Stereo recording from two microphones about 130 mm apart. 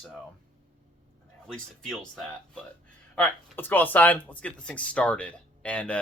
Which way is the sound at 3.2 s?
15° left (ahead or behind).